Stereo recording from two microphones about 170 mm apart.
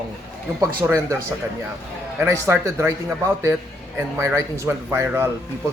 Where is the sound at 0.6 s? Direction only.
15° right (ahead or behind).